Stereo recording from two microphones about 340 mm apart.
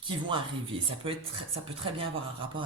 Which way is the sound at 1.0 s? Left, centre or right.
Centre.